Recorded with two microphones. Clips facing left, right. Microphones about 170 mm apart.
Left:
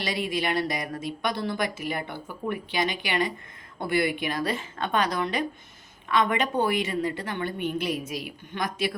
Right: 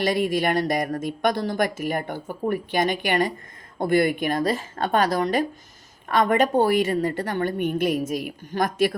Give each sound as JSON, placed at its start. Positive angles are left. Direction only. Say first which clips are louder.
{"t": 0.0, "sound": "speech", "louder": "right 7 dB", "side_deg": -50}